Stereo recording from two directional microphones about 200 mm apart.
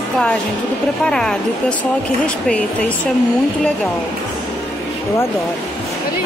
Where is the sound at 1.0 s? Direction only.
5° left (ahead or behind).